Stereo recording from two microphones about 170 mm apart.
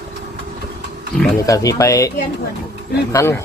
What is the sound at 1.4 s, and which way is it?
Speech, 20° left (ahead or behind).